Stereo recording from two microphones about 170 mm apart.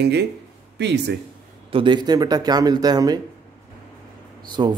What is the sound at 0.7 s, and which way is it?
Speech, 90° right.